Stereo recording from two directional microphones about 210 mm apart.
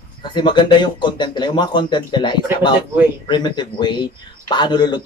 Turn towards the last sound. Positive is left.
turn(degrees=20)  # may be behind; listen again after turning